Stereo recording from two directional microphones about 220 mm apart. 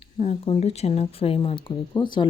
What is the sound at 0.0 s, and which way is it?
Speech, 25° left (ahead or behind).